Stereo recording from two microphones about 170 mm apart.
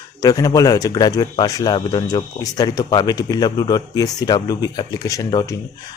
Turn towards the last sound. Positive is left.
turn(degrees=20)  # may be behind; listen again after turning